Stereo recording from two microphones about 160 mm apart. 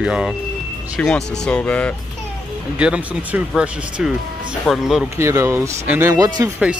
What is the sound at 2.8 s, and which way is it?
Speech, 10° right (ahead or behind).